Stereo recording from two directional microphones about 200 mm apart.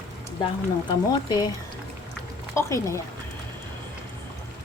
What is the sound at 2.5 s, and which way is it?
Speech, 15° left (ahead or behind).